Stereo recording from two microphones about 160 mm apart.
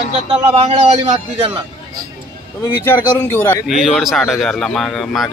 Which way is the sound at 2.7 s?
15° left (ahead or behind).